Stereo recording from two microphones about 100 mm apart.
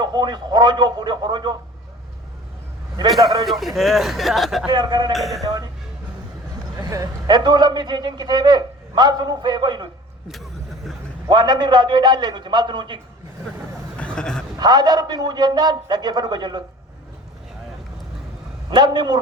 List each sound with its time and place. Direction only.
0.0 s a man's voice: 45° right (ahead or behind)
3.2 s a man's voice: 40° right (ahead or behind)
3.4 s a man's voice: centre (ahead or behind)
4.7 s a man's voice: 45° right (ahead or behind)
5.1 s a man's voice: centre (ahead or behind)
6.7 s a man's voice: 35° right (ahead or behind)
10.2 s vehicle: centre (ahead or behind)
11.3 s a man's voice: 45° right (ahead or behind)
14.0 s a sound: 10° left (ahead or behind)
14.6 s a man's voice: 45° right (ahead or behind)
18.7 s a man's voice: 45° right (ahead or behind)